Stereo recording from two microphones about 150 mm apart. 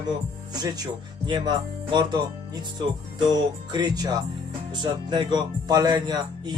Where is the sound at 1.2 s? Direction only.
30° right (ahead or behind).